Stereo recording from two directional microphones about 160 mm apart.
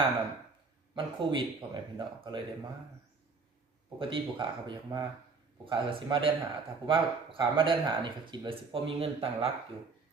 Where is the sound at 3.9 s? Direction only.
30° right (ahead or behind).